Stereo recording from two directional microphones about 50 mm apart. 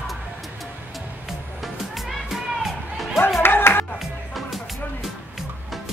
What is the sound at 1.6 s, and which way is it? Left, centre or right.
Music, centre.